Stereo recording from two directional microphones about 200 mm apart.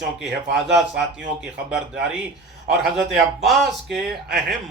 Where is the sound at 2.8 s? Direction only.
Centre (ahead or behind).